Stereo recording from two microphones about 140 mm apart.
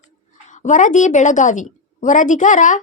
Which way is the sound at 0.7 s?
60° left (ahead or behind).